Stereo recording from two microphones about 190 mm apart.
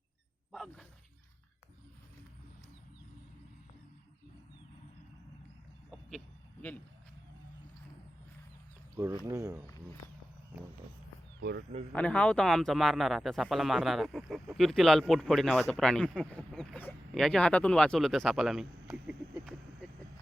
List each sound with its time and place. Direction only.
0.5 s speech: centre (ahead or behind)
5.9 s a sound: 5° left (ahead or behind)
9.2 s speech: 15° right (ahead or behind)
11.3 s speech: 60° right (ahead or behind)
11.9 s speech: 5° left (ahead or behind)